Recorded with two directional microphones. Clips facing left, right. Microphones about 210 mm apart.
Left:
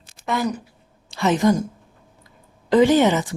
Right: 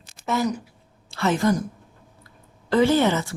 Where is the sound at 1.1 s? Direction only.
20° left (ahead or behind).